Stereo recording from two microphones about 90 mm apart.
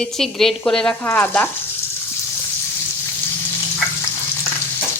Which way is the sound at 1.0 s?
20° left (ahead or behind).